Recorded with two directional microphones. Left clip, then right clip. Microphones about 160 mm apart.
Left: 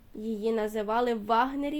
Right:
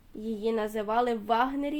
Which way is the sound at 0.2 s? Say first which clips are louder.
Even; 30° left (ahead or behind).